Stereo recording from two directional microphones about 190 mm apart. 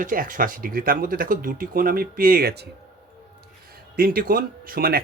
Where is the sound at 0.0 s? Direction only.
45° right (ahead or behind).